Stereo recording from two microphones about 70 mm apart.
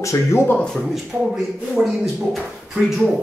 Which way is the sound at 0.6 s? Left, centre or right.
Centre.